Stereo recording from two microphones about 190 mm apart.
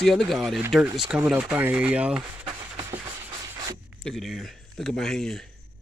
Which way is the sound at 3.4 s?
20° right (ahead or behind).